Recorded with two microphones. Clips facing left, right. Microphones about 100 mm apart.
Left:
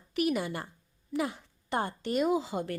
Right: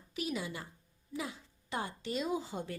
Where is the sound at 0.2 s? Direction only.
65° left (ahead or behind).